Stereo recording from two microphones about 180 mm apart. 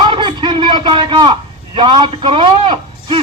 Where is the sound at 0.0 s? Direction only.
25° right (ahead or behind).